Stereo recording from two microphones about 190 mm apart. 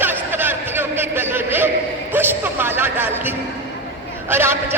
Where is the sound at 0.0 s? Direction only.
10° right (ahead or behind).